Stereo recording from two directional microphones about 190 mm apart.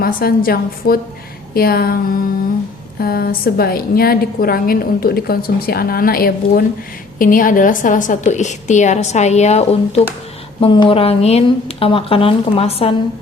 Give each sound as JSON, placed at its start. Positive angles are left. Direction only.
{"t": 0.0, "sound": "a woman's voice", "side_deg": 50}
{"t": 3.0, "sound": "a woman's voice", "side_deg": 55}